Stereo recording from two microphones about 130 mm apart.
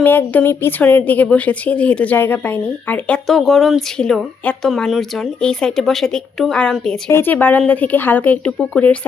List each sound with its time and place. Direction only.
0.0 s a woman's voice: 15° left (ahead or behind)
7.1 s a woman's voice: 15° left (ahead or behind)